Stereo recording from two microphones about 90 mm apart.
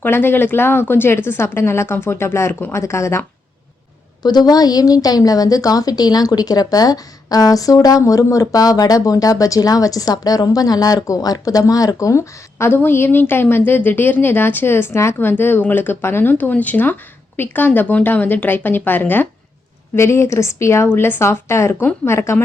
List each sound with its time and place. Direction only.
0.0 s speech: 25° left (ahead or behind)
4.2 s a woman's voice: 50° left (ahead or behind); by 20.8 s 30° left (ahead or behind)
20.8 s speech: 20° left (ahead or behind)